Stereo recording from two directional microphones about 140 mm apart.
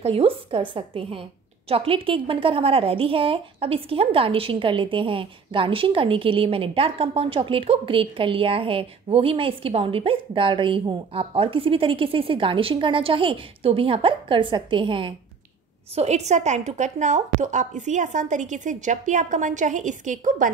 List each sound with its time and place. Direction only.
0.0 s a woman's voice: 45° right (ahead or behind)
15.9 s a woman's voice: 50° right (ahead or behind); by 20.5 s 65° right (ahead or behind)